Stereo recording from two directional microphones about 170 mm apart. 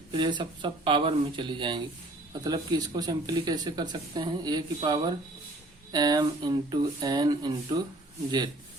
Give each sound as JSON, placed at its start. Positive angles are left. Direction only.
{"t": 0.1, "sound": "speech", "side_deg": -30}